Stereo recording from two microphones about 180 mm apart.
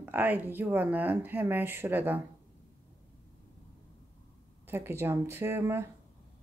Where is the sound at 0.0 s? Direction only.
10° right (ahead or behind).